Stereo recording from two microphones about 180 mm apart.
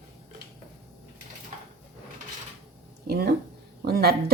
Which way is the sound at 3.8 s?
60° right (ahead or behind).